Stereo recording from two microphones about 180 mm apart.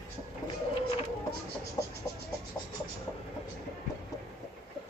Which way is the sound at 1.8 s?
25° left (ahead or behind).